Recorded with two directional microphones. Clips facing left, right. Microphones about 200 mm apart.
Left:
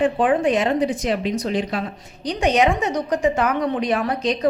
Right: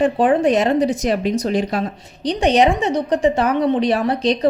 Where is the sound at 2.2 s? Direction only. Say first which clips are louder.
Right 3 dB; 30° right (ahead or behind).